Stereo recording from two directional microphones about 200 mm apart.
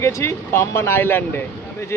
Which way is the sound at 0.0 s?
15° left (ahead or behind).